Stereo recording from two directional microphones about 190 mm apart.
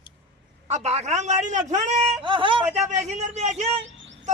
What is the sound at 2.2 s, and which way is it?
Speech, 25° right (ahead or behind).